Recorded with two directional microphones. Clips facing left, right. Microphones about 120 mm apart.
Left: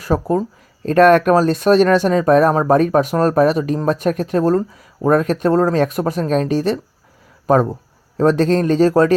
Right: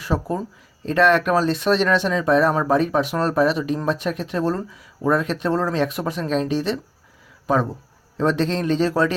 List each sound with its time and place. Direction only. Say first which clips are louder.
0.0 s speech: left 6 dB; 40° left (ahead or behind)